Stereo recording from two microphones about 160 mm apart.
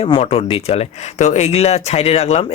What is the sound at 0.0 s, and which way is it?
Speech, 40° left (ahead or behind).